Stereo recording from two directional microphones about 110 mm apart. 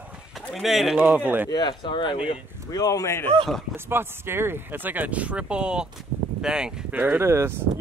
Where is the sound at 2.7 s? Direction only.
30° left (ahead or behind).